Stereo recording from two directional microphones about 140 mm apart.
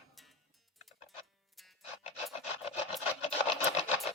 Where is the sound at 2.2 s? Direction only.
45° left (ahead or behind).